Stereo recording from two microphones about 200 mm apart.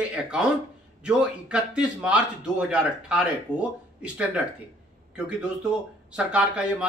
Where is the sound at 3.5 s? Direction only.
10° left (ahead or behind).